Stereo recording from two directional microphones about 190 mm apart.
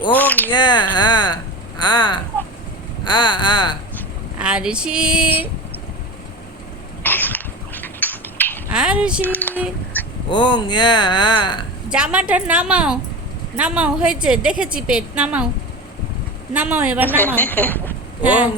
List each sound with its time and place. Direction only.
0.1 s speech: 10° left (ahead or behind)
0.5 s speech: 25° left (ahead or behind)
3.0 s a sound: 25° left (ahead or behind)
4.4 s speech: 5° right (ahead or behind)
7.0 s a sound: 10° left (ahead or behind)
8.7 s a woman's voice: 5° right (ahead or behind)
9.2 s a sound: 10° left (ahead or behind)
10.2 s speech: 25° left (ahead or behind)
11.9 s a woman's voice: 5° right (ahead or behind)
16.5 s speech: 10° right (ahead or behind)
17.2 s speech: 10° left (ahead or behind)
18.2 s speech: 10° right (ahead or behind)